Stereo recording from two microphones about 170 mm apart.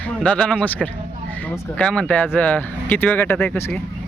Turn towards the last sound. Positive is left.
turn(degrees=15)  # may be behind; listen again after turning